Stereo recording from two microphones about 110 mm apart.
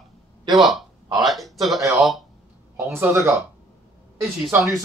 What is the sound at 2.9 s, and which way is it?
Speech, 25° right (ahead or behind).